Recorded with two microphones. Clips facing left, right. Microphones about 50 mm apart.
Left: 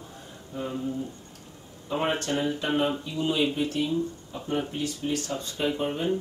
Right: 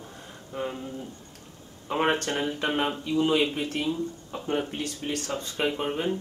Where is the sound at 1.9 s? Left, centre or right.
Right.